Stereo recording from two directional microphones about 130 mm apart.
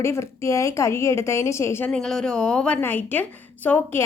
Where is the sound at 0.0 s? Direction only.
20° left (ahead or behind).